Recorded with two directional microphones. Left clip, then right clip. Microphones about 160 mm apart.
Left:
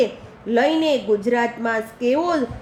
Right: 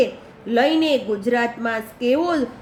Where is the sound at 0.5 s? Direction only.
25° left (ahead or behind).